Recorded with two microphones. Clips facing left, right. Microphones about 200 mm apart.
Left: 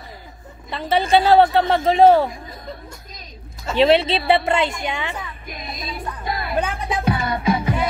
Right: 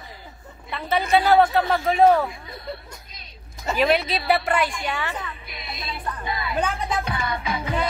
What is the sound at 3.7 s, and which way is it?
A woman's voice, 30° left (ahead or behind).